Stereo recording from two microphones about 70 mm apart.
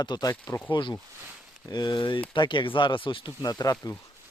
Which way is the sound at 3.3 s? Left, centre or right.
Left.